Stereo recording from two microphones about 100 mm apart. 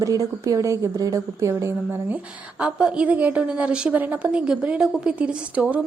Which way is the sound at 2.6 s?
10° right (ahead or behind).